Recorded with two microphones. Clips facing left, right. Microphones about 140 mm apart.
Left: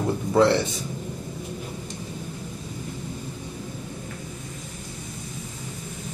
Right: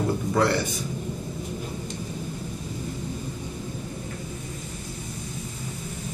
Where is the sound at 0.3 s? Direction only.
25° left (ahead or behind).